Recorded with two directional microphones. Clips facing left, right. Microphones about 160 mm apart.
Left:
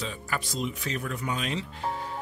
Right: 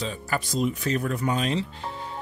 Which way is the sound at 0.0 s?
35° right (ahead or behind).